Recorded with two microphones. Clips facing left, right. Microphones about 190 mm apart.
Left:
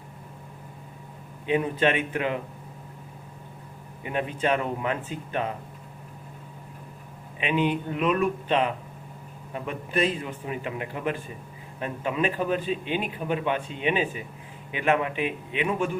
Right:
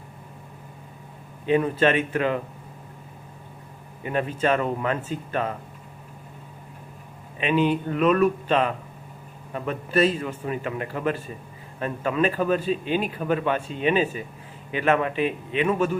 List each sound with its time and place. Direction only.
1.5 s a man's voice: 15° left (ahead or behind)
4.0 s a man's voice: 15° left (ahead or behind)
7.3 s a man's voice: 15° left (ahead or behind)